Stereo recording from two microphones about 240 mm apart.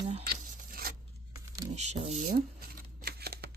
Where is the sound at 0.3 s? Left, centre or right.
Right.